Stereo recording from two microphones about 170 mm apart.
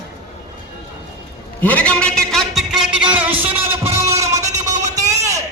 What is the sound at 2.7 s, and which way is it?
Music, 5° right (ahead or behind).